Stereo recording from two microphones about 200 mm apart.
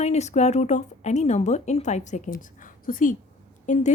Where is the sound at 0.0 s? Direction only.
35° left (ahead or behind).